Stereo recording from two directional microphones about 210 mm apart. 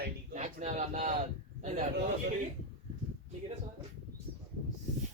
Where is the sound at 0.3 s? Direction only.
35° right (ahead or behind).